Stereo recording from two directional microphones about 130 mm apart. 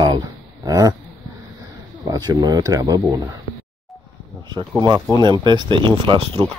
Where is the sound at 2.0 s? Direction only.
30° right (ahead or behind).